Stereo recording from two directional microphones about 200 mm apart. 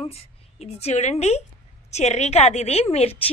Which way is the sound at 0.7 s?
30° left (ahead or behind).